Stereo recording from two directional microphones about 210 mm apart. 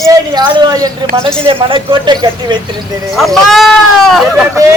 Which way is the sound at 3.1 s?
Centre (ahead or behind).